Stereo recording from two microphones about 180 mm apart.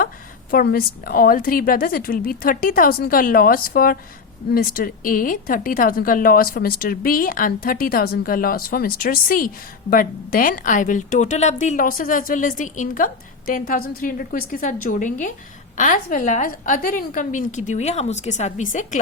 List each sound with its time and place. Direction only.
0.5 s a woman's voice: 55° left (ahead or behind)